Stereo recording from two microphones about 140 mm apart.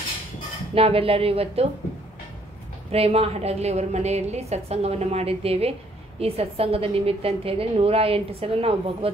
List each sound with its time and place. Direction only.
0.7 s a woman's voice: 45° right (ahead or behind)
2.9 s a woman's voice: 45° right (ahead or behind)